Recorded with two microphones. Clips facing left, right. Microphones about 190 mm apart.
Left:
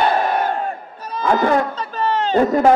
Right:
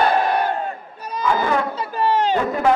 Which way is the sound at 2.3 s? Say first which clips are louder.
Left 5 dB; 40° left (ahead or behind).